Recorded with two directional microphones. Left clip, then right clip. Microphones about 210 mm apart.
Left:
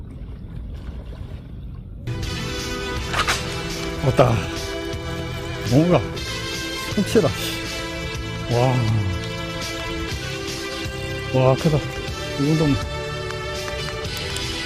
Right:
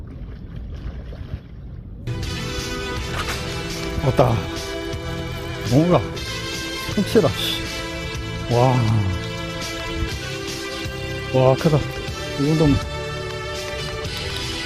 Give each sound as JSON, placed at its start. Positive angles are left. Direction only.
{"t": 2.0, "sound": "music", "side_deg": 0}